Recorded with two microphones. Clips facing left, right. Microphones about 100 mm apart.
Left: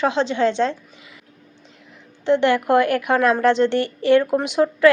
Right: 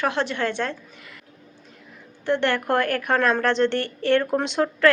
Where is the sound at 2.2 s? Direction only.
15° left (ahead or behind).